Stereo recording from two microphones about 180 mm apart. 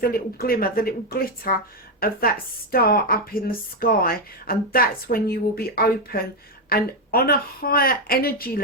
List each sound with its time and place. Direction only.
0.0 s speech: 55° left (ahead or behind)